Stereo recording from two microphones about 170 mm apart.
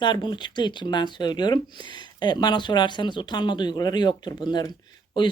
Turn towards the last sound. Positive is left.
turn(degrees=25)  # may be behind; listen again after turning